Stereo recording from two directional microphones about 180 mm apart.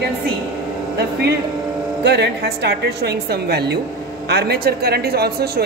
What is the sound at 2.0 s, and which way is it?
A woman's voice, 70° right (ahead or behind).